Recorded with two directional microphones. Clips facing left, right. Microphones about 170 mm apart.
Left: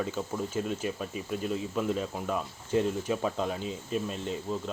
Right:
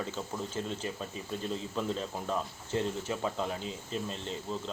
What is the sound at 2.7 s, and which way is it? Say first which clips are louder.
Speech: left 5 dB; 15° left (ahead or behind).